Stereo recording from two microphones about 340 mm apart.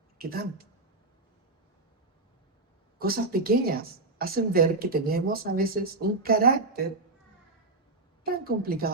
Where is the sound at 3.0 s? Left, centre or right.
Right.